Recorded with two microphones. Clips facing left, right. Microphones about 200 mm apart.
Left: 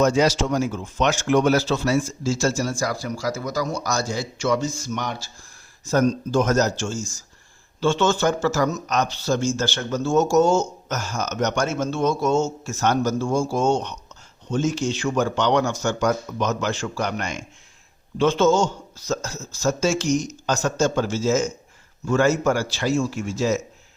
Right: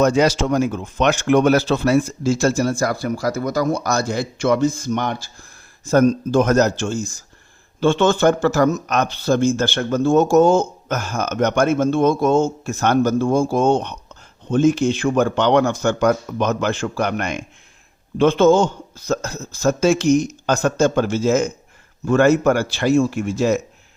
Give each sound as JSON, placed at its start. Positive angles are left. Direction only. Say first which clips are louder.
{"t": 0.0, "sound": "speech", "louder": "right 3 dB", "side_deg": -60}